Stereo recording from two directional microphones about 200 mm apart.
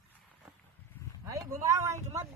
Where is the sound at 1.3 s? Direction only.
15° right (ahead or behind).